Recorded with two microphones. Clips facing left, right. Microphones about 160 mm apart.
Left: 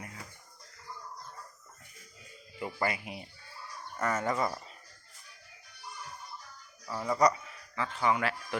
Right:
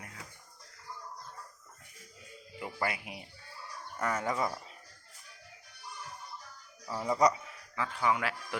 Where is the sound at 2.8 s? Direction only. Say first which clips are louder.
Left 2 dB; 5° right (ahead or behind).